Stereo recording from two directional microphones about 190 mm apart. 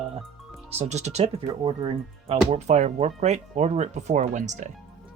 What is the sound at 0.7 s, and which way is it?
Speech, 35° right (ahead or behind).